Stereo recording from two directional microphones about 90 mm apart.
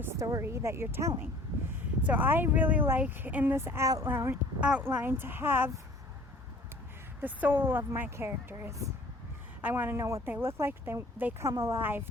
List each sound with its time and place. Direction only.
0.2 s speech: 40° right (ahead or behind)
7.2 s speech: 20° right (ahead or behind)